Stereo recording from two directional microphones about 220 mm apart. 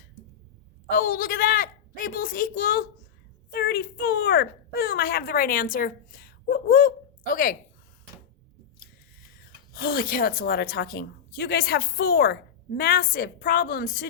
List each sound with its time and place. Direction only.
0.9 s speech: 35° left (ahead or behind)
9.4 s speech: 45° left (ahead or behind)